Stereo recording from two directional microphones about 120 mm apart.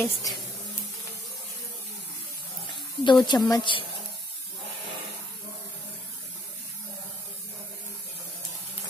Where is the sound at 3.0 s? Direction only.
40° left (ahead or behind).